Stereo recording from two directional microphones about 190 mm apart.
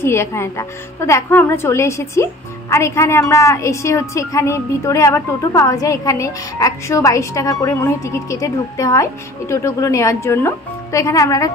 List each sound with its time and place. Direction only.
0.0 s a woman's voice: 15° left (ahead or behind)